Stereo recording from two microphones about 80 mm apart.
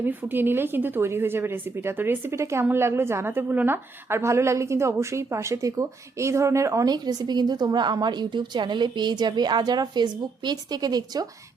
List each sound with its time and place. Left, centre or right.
0.0 s a woman's voice: right
6.8 s a woman's voice: right